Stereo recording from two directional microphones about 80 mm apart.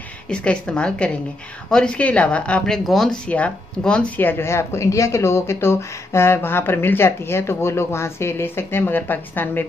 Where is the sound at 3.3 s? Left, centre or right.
Centre.